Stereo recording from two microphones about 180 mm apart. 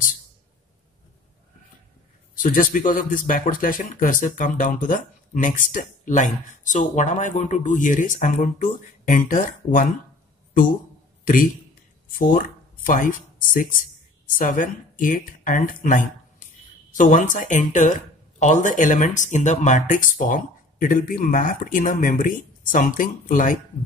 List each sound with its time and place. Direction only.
2.3 s speech: 45° left (ahead or behind)
12.1 s speech: 50° left (ahead or behind)